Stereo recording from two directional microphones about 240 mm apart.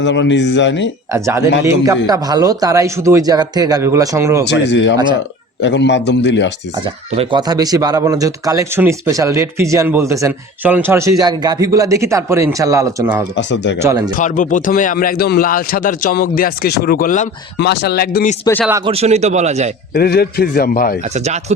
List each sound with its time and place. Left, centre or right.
0.0 s a man's voice: left
1.1 s speech: centre
4.4 s a man's voice: left
6.8 s speech: centre
13.3 s a man's voice: left
13.8 s speech: centre
14.2 s speech: left
18.9 s a man's voice: right
19.9 s speech: left
21.0 s a man's voice: right